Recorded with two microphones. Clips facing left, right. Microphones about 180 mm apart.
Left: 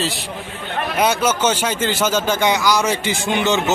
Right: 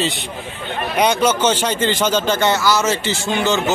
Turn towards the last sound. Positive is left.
turn(degrees=20)  # may be behind; listen again after turning